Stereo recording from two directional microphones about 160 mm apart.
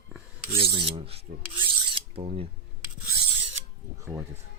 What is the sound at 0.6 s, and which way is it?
Filing, 35° right (ahead or behind).